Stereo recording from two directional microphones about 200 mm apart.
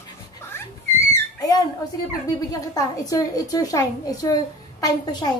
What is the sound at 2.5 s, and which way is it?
A woman's voice, 15° left (ahead or behind).